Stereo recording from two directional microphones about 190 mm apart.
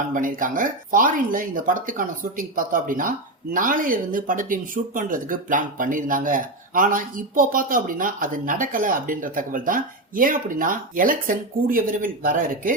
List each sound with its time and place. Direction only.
0.1 s speech: 45° right (ahead or behind)